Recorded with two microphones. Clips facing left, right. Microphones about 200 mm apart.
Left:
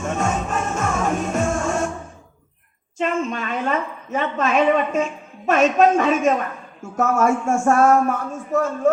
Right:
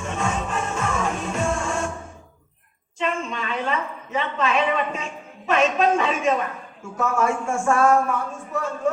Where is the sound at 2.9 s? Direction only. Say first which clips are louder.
Left 4 dB; 45° left (ahead or behind).